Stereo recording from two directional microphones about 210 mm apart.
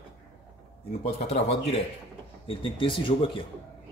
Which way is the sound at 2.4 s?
25° left (ahead or behind).